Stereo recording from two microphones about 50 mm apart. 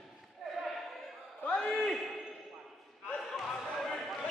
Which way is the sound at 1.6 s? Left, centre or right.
Centre.